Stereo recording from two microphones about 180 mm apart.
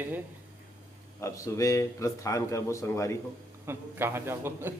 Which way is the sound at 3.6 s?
15° right (ahead or behind).